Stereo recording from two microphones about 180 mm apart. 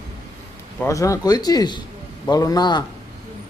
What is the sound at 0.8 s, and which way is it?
Speech, 15° left (ahead or behind).